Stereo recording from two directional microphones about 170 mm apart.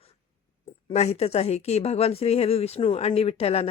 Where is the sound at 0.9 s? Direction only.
40° left (ahead or behind).